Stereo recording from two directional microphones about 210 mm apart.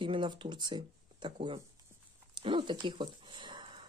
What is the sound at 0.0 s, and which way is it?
Speech, 20° right (ahead or behind).